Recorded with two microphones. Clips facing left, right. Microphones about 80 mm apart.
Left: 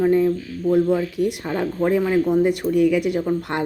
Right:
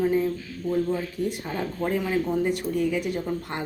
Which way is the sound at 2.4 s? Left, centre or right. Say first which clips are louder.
Left 7 dB; left.